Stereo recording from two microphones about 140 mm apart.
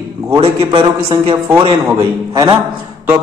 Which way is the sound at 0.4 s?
40° right (ahead or behind).